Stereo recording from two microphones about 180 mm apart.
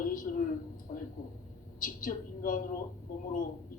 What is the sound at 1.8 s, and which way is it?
Speech, 50° left (ahead or behind).